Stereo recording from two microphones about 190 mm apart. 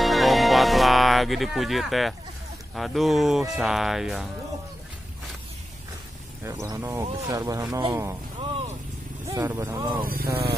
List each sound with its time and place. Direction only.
0.0 s music: centre (ahead or behind)
2.7 s speech: centre (ahead or behind)
6.4 s speech: 15° right (ahead or behind)
9.3 s speech: 10° right (ahead or behind)
10.0 s speech: 50° right (ahead or behind)